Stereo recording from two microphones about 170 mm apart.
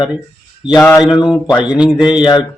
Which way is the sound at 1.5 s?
5° right (ahead or behind).